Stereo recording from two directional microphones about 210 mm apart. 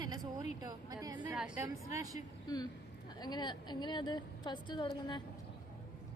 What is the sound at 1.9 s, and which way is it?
Speech, 15° right (ahead or behind).